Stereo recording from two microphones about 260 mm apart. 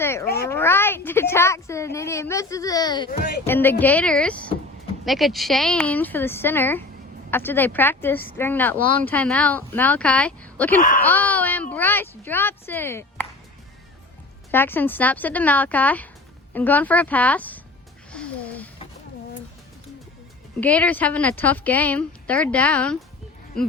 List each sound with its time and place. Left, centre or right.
0.0 s speech: centre
3.1 s speech: left
3.4 s a woman's voice: centre
10.8 s speech: left
11.0 s speech: centre
14.5 s speech: centre
18.1 s a sound: centre
20.6 s a woman's voice: centre